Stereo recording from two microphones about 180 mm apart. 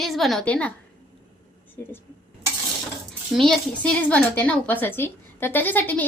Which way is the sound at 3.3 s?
5° left (ahead or behind).